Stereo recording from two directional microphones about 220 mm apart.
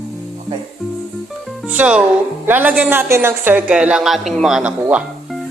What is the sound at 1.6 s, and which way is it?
A woman's voice, 5° right (ahead or behind).